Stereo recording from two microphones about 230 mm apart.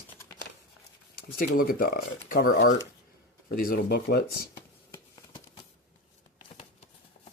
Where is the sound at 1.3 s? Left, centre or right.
Left.